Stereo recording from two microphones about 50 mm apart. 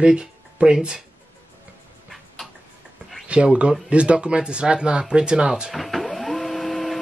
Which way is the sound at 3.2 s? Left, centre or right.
Right.